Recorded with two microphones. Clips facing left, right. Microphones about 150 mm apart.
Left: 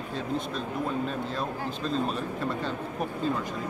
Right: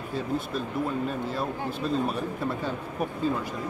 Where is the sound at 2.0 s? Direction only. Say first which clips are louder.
Right 1 dB; 10° right (ahead or behind).